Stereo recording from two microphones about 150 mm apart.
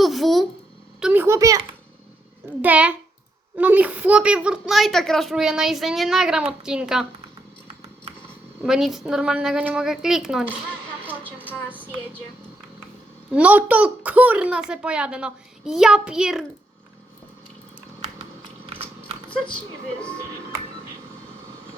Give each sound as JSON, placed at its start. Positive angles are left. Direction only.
{"t": 0.0, "sound": "a sound", "side_deg": 0}
{"t": 2.6, "sound": "a woman's voice", "side_deg": -10}
{"t": 8.6, "sound": "a child's voice", "side_deg": -5}
{"t": 13.3, "sound": "a woman's voice", "side_deg": -10}